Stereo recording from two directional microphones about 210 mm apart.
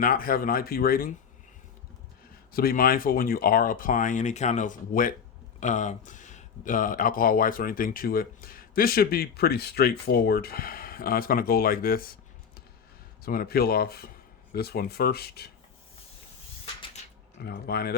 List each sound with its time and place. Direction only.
0.0 s speech: 45° left (ahead or behind)
2.5 s speech: 45° left (ahead or behind)
13.2 s speech: 45° left (ahead or behind)
17.4 s speech: 50° left (ahead or behind)